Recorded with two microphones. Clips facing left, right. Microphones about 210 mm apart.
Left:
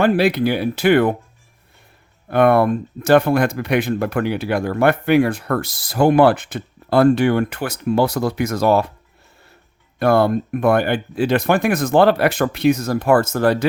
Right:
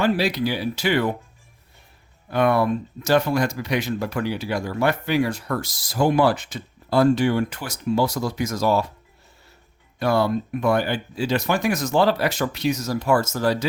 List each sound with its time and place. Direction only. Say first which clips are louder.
0.0 s speech: left 5 dB; 55° left (ahead or behind)
2.3 s speech: left 5 dB; 55° left (ahead or behind)
10.0 s speech: left 5 dB; 55° left (ahead or behind)